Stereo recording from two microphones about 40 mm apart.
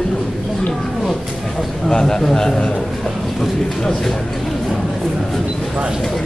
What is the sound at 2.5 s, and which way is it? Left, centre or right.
Speech, left.